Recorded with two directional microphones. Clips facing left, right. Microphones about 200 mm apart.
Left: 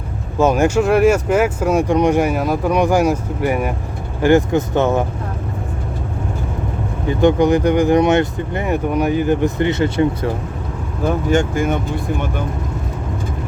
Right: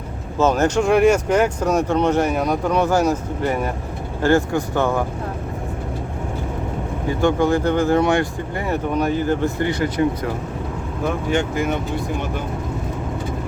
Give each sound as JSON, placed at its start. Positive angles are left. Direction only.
{"t": 0.3, "sound": "speech", "side_deg": 10}
{"t": 7.1, "sound": "speech", "side_deg": 20}
{"t": 11.3, "sound": "speech", "side_deg": 45}